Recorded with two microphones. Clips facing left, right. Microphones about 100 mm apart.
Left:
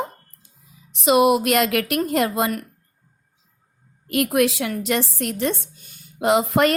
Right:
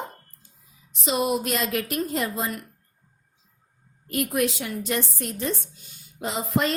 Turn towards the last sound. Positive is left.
turn(degrees=70)  # may be behind; listen again after turning